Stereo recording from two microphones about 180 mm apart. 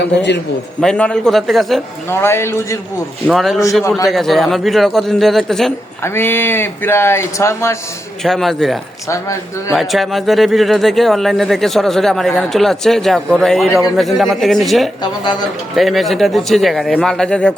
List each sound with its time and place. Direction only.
0.0 s a man's voice: 70° left (ahead or behind)
0.8 s speech: 5° left (ahead or behind)
2.0 s speech: 15° left (ahead or behind)
3.2 s speech: centre (ahead or behind)
3.8 s a man's voice: 20° left (ahead or behind)
4.1 s speech: centre (ahead or behind)
6.0 s speech: 10° left (ahead or behind)
8.2 s speech: centre (ahead or behind)
9.0 s speech: 15° left (ahead or behind)
9.7 s speech: centre (ahead or behind)